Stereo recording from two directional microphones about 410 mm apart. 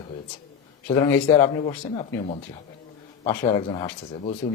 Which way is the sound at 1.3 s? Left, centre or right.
Centre.